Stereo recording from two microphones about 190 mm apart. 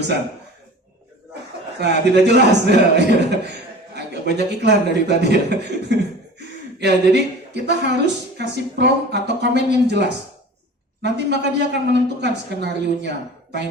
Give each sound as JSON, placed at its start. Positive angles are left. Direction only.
{"t": 1.8, "sound": "a woman's voice", "side_deg": -65}